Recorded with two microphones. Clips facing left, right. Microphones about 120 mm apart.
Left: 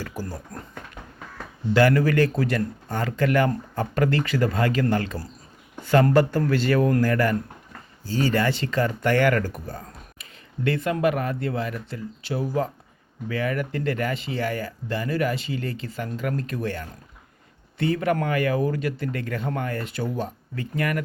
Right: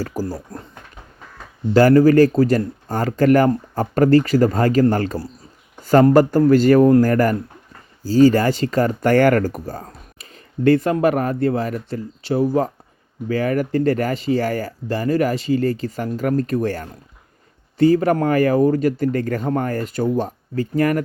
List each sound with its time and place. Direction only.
0.0 s speech: 35° right (ahead or behind)
1.7 s speech: 35° right (ahead or behind)